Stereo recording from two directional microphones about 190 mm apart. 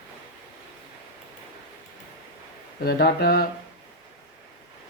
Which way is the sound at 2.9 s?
55° left (ahead or behind).